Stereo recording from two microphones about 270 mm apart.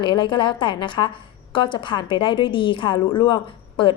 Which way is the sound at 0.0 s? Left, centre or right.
Centre.